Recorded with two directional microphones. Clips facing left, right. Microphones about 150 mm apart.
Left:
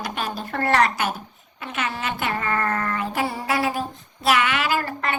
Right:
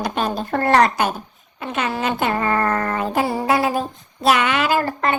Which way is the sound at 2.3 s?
35° right (ahead or behind).